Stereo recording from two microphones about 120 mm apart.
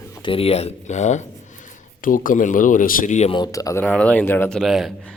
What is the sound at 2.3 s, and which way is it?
Speech, 90° left.